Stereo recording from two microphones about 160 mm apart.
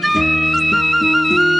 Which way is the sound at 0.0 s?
Centre (ahead or behind).